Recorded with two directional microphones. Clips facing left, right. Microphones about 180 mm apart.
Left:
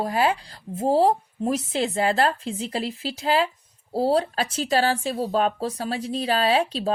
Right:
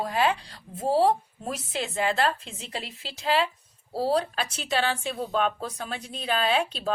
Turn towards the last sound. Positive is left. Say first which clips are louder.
# left 4 dB
turn(degrees=35)  # may be behind; listen again after turning